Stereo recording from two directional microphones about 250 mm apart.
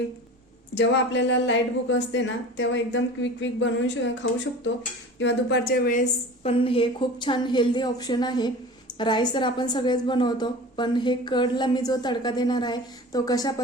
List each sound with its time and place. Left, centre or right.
0.7 s a woman's voice: left; by 13.5 s centre